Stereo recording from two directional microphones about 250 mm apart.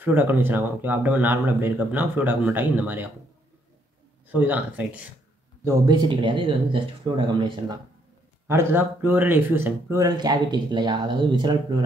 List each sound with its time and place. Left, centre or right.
0.0 s speech: centre
4.3 s speech: centre